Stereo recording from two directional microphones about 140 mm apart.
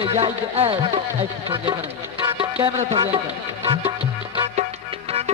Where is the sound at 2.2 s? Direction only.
40° right (ahead or behind).